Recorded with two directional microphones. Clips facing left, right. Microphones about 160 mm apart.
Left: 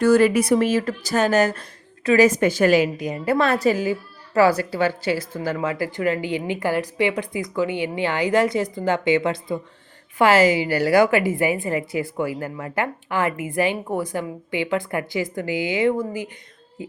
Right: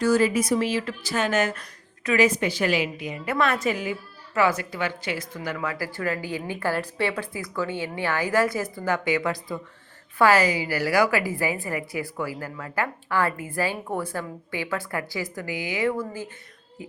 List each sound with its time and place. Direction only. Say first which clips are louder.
0.0 s a woman's voice: left 5 dB; 60° left (ahead or behind); by 16.3 s 15° left (ahead or behind)